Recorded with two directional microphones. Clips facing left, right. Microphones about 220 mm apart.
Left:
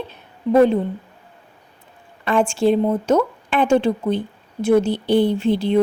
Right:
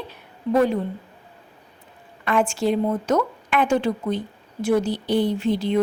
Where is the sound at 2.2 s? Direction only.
30° left (ahead or behind).